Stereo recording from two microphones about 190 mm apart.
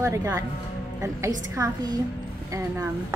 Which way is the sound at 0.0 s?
15° right (ahead or behind).